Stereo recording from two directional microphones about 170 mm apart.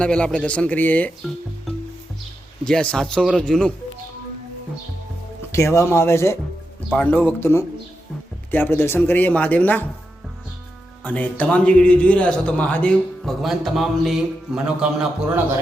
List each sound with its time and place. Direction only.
0.0 s speech: 5° left (ahead or behind)
2.6 s a man's voice: 5° left (ahead or behind)
5.5 s speech: 15° left (ahead or behind)
11.0 s speech: 10° left (ahead or behind)